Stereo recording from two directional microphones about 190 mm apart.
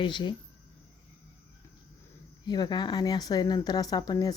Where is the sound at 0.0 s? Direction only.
25° left (ahead or behind).